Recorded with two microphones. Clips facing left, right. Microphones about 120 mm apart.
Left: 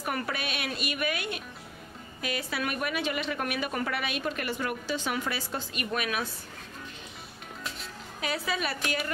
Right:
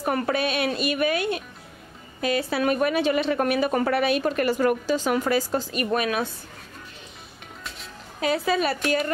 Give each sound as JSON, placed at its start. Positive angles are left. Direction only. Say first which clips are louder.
{"t": 0.0, "sound": "a woman's voice", "louder": "right 9 dB", "side_deg": -35}
{"t": 8.2, "sound": "a woman's voice", "louder": "right 9 dB", "side_deg": -35}